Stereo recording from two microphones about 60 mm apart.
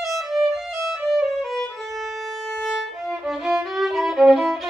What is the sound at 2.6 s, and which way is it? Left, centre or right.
Violin, centre.